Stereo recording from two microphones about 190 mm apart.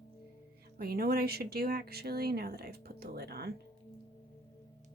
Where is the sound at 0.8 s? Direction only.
55° right (ahead or behind).